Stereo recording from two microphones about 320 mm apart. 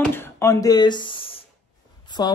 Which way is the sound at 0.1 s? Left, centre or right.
Centre.